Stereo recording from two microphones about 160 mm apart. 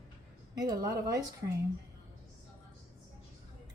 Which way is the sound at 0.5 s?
25° right (ahead or behind).